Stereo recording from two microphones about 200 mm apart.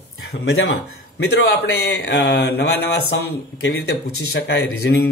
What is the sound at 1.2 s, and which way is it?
Speech, 55° left (ahead or behind).